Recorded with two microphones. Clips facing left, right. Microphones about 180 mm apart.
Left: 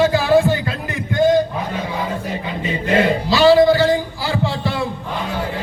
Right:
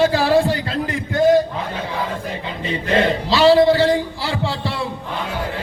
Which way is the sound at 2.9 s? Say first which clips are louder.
Left 1 dB; 30° right (ahead or behind).